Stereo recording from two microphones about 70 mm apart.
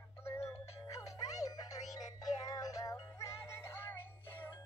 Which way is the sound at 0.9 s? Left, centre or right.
Left.